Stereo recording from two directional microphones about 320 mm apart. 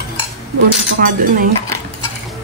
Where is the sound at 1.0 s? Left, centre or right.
Right.